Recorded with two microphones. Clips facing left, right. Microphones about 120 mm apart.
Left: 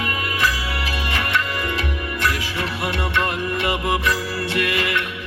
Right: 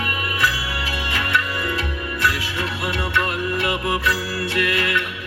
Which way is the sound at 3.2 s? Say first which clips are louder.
Even; 25° left (ahead or behind).